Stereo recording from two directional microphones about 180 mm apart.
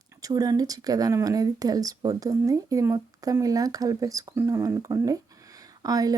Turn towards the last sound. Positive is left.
turn(degrees=-20)  # may be behind; listen again after turning